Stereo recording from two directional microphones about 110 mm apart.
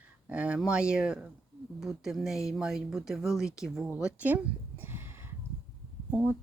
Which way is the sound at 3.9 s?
10° right (ahead or behind).